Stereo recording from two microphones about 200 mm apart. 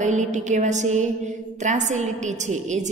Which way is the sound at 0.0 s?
35° right (ahead or behind).